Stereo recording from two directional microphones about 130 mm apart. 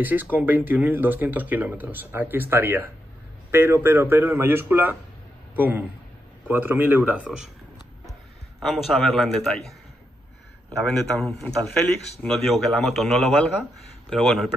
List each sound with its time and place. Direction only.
0.0 s speech: 15° right (ahead or behind)
8.5 s a man's voice: centre (ahead or behind)
11.1 s a man's voice: 10° left (ahead or behind)
12.3 s a man's voice: centre (ahead or behind)